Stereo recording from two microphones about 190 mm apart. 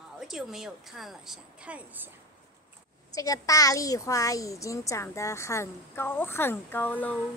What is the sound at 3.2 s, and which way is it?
Speech, 15° left (ahead or behind).